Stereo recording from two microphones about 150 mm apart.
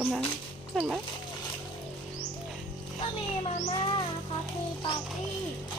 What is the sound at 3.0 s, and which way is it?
Speech, 40° left (ahead or behind).